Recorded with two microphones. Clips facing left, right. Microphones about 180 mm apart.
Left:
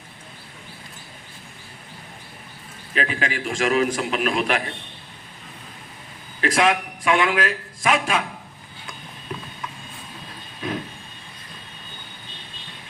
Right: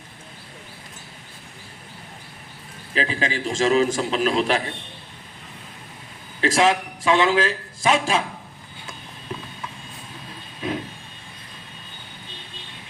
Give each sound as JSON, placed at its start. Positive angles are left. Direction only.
{"t": 2.9, "sound": "a man's voice", "side_deg": -30}
{"t": 6.4, "sound": "a man's voice", "side_deg": -25}